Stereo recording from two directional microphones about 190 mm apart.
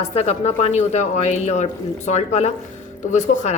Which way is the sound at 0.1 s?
35° left (ahead or behind).